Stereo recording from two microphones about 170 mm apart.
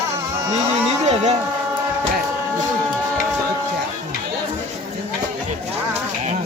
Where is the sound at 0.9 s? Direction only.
40° right (ahead or behind).